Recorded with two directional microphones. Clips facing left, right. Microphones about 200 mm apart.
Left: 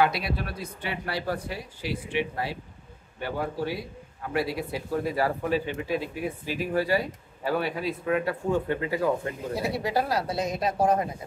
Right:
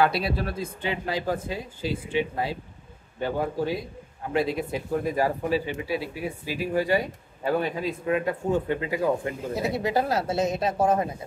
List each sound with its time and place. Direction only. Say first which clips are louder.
0.0 s speech: right 2 dB; 30° right (ahead or behind)
3.2 s speech: right 3 dB; 20° right (ahead or behind)